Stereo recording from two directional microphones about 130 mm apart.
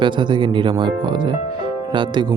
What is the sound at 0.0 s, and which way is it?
Speech, 35° right (ahead or behind).